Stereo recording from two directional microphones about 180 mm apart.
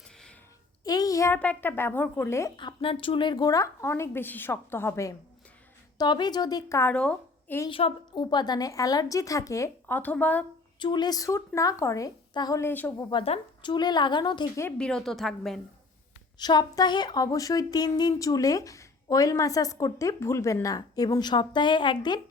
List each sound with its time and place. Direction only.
0.9 s speech: 20° left (ahead or behind)
2.6 s speech: 30° left (ahead or behind); by 7.7 s 10° left (ahead or behind)
7.7 s a woman's voice: 30° left (ahead or behind); by 10.4 s 10° left (ahead or behind)
10.8 s a woman's voice: 25° left (ahead or behind)
13.1 s a woman's voice: 30° left (ahead or behind)
14.8 s a woman's voice: 5° left (ahead or behind)
16.4 s a woman's voice: 25° left (ahead or behind)